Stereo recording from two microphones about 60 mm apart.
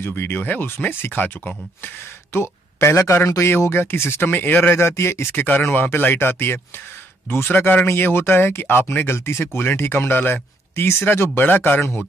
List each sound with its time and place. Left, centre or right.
0.0 s speech: left
2.3 s speech: left
4.2 s speech: left
5.3 s speech: left